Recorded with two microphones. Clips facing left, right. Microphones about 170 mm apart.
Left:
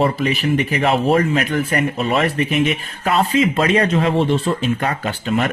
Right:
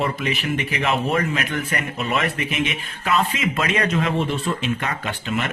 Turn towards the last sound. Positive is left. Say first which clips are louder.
# left 6 dB
turn(degrees=35)  # may be behind; listen again after turning